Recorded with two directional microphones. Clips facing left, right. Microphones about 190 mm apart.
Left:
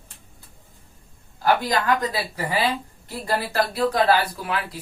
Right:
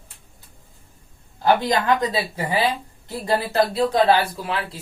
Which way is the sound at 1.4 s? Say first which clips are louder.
Right 2 dB; 25° right (ahead or behind).